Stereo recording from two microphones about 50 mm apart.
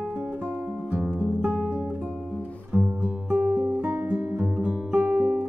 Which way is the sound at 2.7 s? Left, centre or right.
Right.